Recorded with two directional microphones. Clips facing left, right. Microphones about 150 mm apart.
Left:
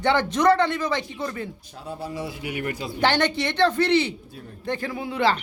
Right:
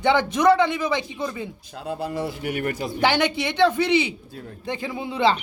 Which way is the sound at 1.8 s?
60° right (ahead or behind).